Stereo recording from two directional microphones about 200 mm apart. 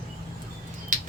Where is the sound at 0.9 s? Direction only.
40° right (ahead or behind).